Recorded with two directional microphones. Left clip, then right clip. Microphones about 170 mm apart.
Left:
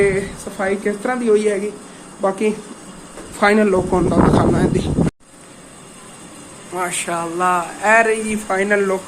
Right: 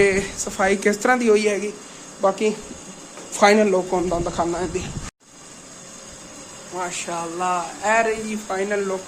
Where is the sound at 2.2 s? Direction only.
5° right (ahead or behind).